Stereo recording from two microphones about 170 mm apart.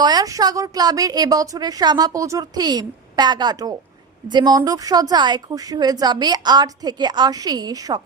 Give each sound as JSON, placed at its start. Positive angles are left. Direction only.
{"t": 0.0, "sound": "a woman's voice", "side_deg": -25}